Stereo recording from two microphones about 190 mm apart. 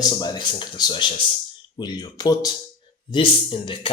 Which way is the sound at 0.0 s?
20° left (ahead or behind).